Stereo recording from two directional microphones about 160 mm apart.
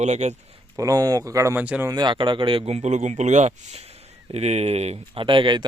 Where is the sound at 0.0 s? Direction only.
45° right (ahead or behind).